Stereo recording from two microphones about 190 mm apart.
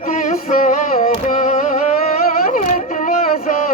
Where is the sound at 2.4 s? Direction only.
40° left (ahead or behind).